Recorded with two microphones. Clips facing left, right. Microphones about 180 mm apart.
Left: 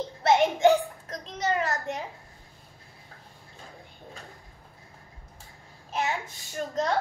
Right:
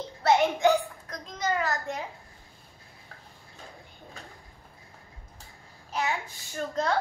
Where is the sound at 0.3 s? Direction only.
25° left (ahead or behind).